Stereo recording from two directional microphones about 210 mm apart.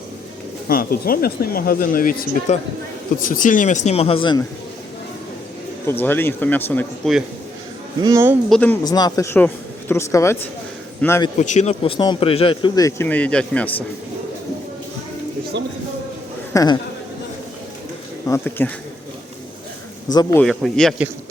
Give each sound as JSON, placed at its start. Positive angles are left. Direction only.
{"t": 0.7, "sound": "speech", "side_deg": 45}
{"t": 5.8, "sound": "speech", "side_deg": 10}
{"t": 8.0, "sound": "speech", "side_deg": -10}
{"t": 8.4, "sound": "speech", "side_deg": 5}
{"t": 8.8, "sound": "speech", "side_deg": 20}
{"t": 11.3, "sound": "speech", "side_deg": 35}
{"t": 16.5, "sound": "a woman's voice", "side_deg": 15}
{"t": 18.3, "sound": "speech", "side_deg": 10}
{"t": 20.4, "sound": "speech", "side_deg": 0}